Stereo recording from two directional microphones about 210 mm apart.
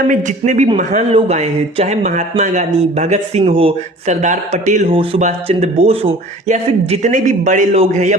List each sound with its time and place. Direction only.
0.1 s speech: 35° right (ahead or behind)